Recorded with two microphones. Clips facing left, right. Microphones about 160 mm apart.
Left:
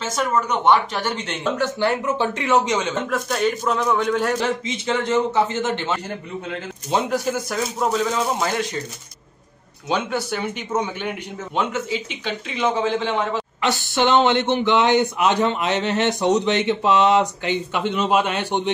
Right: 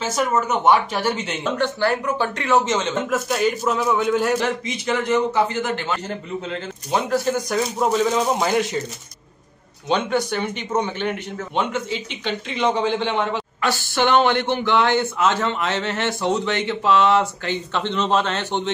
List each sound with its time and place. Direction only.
0.5 s speech: 5° right (ahead or behind)
1.8 s speech: 20° left (ahead or behind)
3.1 s speech: 5° right (ahead or behind)
4.6 s a man's voice: 25° left (ahead or behind)
6.9 s speech: 10° left (ahead or behind)
9.8 s speech: 5° left (ahead or behind)
13.6 s a man's voice: 20° left (ahead or behind)